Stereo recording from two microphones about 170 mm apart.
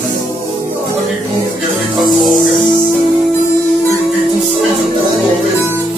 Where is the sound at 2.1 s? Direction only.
Centre (ahead or behind).